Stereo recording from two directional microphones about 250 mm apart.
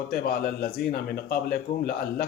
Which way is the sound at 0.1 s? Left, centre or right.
Left.